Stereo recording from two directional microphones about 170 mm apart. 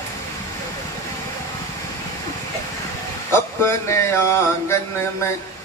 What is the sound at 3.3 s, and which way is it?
Mantra, 15° left (ahead or behind).